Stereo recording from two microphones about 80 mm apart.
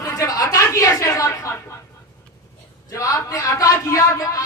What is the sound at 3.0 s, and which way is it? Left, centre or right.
Speech, left.